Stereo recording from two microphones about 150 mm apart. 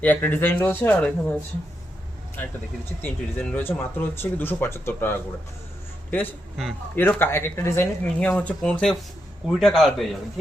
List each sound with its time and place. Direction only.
0.0 s speech: 10° left (ahead or behind)
3.0 s speech: 10° left (ahead or behind)
6.9 s a man's voice: 15° left (ahead or behind)